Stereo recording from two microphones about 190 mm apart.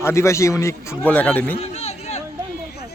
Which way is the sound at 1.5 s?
35° left (ahead or behind).